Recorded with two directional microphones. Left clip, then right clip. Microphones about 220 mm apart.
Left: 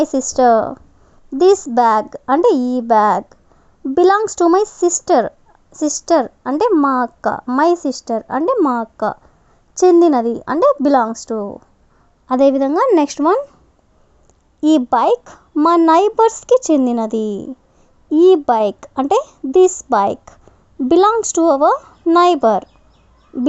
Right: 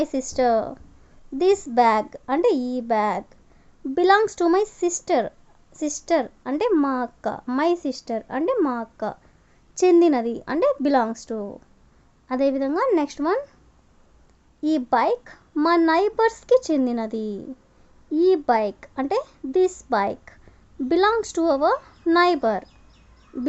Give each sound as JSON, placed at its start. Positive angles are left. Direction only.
{"t": 0.0, "sound": "speech", "side_deg": 25}
{"t": 6.8, "sound": "speech", "side_deg": 5}
{"t": 7.3, "sound": "speech", "side_deg": 20}
{"t": 14.6, "sound": "speech", "side_deg": 30}